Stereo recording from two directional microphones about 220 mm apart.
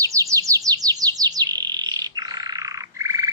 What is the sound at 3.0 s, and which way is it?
Frog, 15° right (ahead or behind).